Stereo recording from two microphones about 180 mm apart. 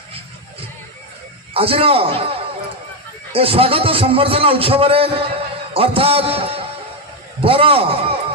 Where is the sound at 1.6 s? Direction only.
30° right (ahead or behind).